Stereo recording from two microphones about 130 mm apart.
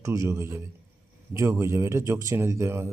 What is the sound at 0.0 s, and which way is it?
A man's voice, 25° right (ahead or behind).